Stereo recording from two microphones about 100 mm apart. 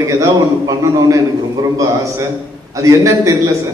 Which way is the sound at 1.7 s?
35° right (ahead or behind).